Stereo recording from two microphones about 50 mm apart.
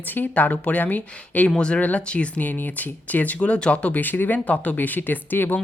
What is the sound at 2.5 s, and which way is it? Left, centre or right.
Speech, left.